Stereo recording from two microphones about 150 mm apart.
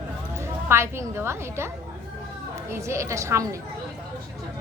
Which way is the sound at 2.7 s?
20° right (ahead or behind).